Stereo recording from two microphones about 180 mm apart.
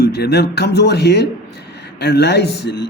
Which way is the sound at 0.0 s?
65° left (ahead or behind).